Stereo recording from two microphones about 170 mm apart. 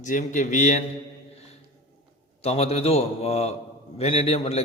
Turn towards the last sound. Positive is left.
turn(degrees=35)  # may be behind; listen again after turning